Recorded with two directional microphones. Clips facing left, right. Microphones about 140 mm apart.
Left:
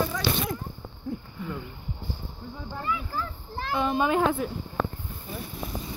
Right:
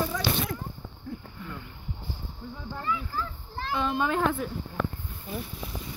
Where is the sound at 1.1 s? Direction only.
15° left (ahead or behind).